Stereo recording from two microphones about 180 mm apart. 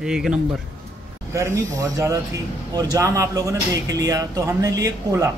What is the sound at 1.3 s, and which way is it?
Speech, 15° right (ahead or behind).